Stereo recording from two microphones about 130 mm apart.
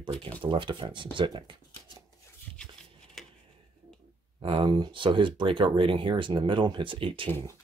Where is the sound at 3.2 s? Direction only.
5° left (ahead or behind).